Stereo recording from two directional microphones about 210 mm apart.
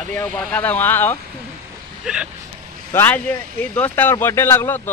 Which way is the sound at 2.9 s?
10° left (ahead or behind).